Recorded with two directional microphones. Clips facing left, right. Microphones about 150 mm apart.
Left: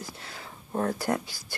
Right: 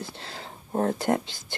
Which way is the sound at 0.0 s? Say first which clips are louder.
Right 3 dB; 30° right (ahead or behind).